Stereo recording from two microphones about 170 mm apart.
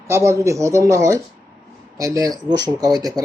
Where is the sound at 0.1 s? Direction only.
15° right (ahead or behind).